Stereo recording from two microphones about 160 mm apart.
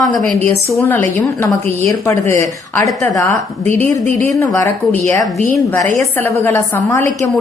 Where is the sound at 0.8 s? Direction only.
15° left (ahead or behind).